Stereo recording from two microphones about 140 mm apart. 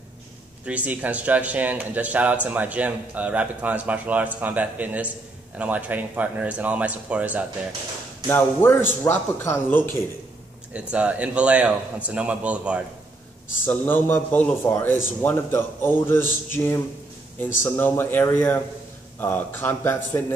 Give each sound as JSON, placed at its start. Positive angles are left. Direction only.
{"t": 0.7, "sound": "speech", "side_deg": -10}
{"t": 8.3, "sound": "a man's voice", "side_deg": 15}
{"t": 10.7, "sound": "speech", "side_deg": -10}
{"t": 13.7, "sound": "a man's voice", "side_deg": 15}